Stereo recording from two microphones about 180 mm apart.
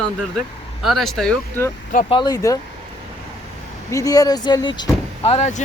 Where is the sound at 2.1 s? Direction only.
25° left (ahead or behind).